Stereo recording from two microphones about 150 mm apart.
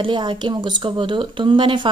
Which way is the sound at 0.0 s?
35° right (ahead or behind).